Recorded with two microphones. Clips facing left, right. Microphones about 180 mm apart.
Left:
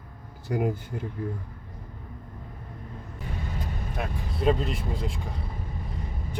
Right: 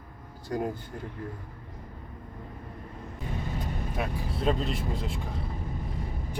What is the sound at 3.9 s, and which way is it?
Speech, centre (ahead or behind).